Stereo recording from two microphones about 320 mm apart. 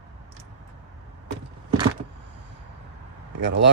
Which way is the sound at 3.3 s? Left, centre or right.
Right.